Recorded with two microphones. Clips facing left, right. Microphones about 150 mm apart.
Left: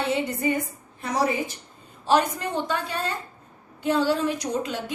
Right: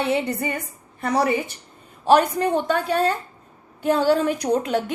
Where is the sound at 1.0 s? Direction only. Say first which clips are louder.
Right 4 dB; 65° right (ahead or behind).